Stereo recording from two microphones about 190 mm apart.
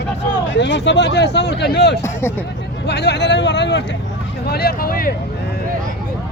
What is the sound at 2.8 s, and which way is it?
Speech, 65° left (ahead or behind).